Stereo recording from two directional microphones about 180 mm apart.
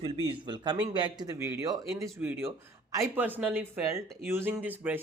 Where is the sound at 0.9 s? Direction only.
25° right (ahead or behind).